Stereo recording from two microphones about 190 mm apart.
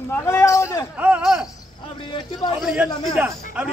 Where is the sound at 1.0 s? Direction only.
5° right (ahead or behind).